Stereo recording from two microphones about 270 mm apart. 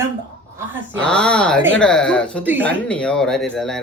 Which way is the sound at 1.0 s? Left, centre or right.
Centre.